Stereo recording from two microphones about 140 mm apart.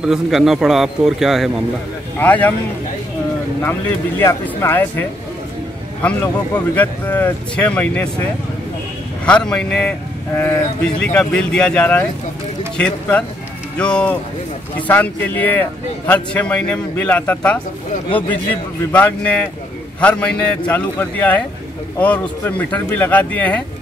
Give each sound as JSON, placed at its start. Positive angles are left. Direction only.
{"t": 0.0, "sound": "a man's voice", "side_deg": -5}
{"t": 2.1, "sound": "a man's voice", "side_deg": 10}
{"t": 4.2, "sound": "a man's voice", "side_deg": 20}
{"t": 6.5, "sound": "a man's voice", "side_deg": 10}